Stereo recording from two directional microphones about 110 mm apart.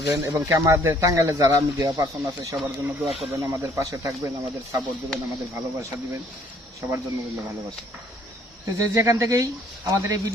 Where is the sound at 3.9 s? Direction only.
30° right (ahead or behind).